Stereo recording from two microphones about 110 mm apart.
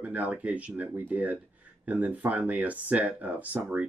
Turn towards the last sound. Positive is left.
turn(degrees=-15)  # may be behind; listen again after turning